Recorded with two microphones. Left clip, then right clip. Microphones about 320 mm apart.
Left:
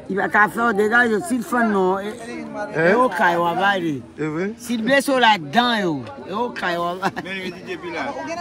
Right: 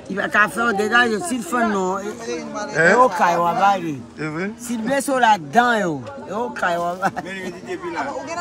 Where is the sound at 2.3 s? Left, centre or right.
Right.